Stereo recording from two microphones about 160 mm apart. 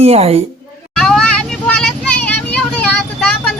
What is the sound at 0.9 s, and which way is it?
Vehicle, 5° left (ahead or behind).